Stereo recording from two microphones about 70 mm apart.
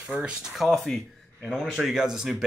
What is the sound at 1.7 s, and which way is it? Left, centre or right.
Speech, centre.